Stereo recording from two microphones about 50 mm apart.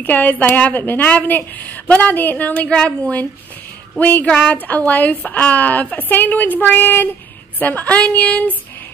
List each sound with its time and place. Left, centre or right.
0.0 s speech: left
7.5 s speech: left